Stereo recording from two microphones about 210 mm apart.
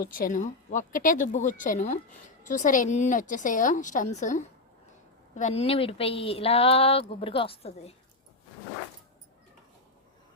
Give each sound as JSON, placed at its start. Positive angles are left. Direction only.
{"t": 0.0, "sound": "speech", "side_deg": 40}